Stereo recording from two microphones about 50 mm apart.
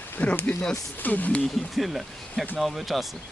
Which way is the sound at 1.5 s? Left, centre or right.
Centre.